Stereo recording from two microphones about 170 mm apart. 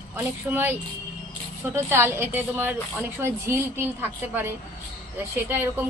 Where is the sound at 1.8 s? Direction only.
15° right (ahead or behind).